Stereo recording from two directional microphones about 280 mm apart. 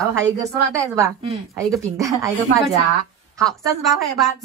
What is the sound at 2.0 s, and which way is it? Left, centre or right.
Speech, centre.